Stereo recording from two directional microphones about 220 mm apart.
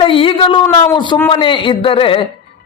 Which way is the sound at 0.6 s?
15° left (ahead or behind).